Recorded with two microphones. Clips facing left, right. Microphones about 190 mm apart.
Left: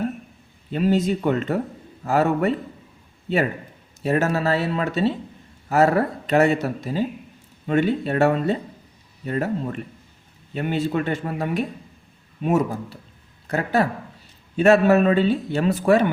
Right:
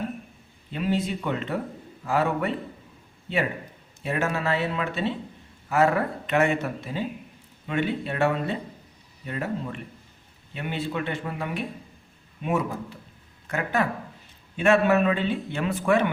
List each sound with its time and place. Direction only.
0.7 s a man's voice: 40° left (ahead or behind)
4.0 s a man's voice: 40° left (ahead or behind)